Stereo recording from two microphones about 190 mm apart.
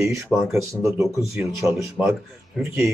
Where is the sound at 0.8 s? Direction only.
15° right (ahead or behind).